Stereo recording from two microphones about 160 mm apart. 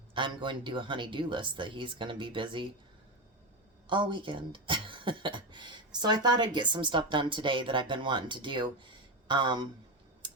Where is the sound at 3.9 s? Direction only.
30° right (ahead or behind).